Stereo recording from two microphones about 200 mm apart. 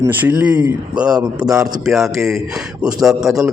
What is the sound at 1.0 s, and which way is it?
Speech, 20° right (ahead or behind).